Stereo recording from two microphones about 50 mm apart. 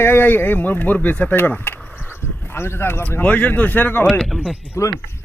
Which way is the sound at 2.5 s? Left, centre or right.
Left.